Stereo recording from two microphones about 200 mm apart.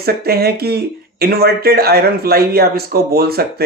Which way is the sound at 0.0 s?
50° right (ahead or behind).